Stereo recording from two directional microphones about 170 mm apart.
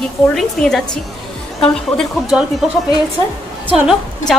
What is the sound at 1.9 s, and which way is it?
A woman's voice, 5° right (ahead or behind).